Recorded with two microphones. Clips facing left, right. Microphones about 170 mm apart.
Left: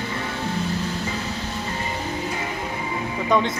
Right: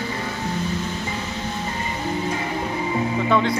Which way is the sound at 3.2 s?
15° left (ahead or behind).